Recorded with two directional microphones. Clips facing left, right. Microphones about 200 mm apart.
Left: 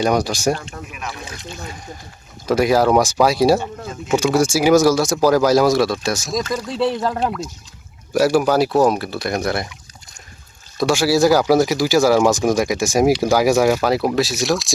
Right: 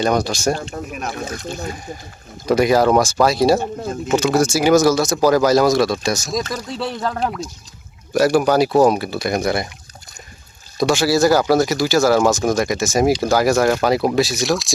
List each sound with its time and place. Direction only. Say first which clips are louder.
0.0 s speech: even; 15° left (ahead or behind)
0.5 s a sound: right 3 dB; 35° right (ahead or behind)
2.5 s speech: right 1 dB; 5° left (ahead or behind)
10.8 s speech: even; 5° left (ahead or behind)